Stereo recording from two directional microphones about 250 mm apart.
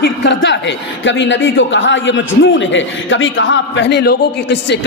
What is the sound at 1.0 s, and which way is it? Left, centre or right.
A man's voice, left.